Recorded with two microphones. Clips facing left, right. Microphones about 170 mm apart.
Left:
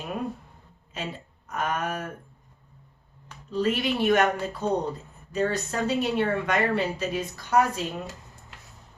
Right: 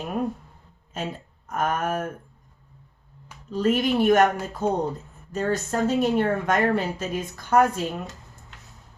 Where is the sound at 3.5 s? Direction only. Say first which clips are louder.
Right 4 dB; 45° right (ahead or behind).